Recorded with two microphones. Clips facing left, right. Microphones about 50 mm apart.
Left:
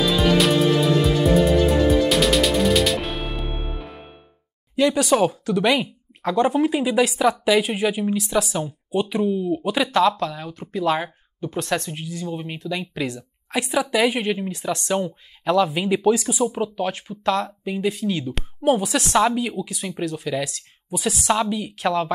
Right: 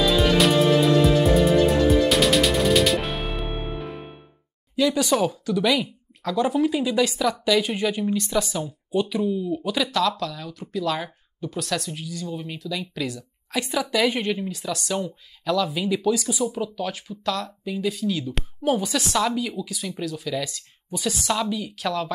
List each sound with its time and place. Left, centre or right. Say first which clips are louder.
0.0 s music: even; centre
4.7 s speech: left 3 dB; left
14.5 s speech: left 4 dB; left